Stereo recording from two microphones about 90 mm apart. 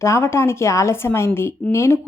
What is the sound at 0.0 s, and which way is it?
A woman's voice, 30° left (ahead or behind).